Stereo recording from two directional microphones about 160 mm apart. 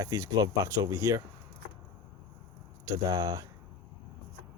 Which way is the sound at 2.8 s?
25° right (ahead or behind).